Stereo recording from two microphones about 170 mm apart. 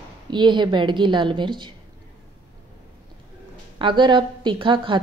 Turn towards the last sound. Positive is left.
turn(degrees=-30)  # may be behind; listen again after turning